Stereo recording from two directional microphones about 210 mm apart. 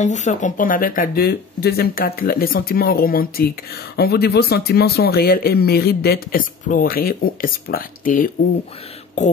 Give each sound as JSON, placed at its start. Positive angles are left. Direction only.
{"t": 0.0, "sound": "speech", "side_deg": 35}